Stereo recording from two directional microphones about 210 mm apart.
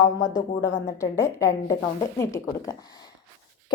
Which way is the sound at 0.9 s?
15° left (ahead or behind).